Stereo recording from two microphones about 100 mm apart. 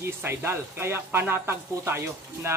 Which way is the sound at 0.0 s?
20° right (ahead or behind).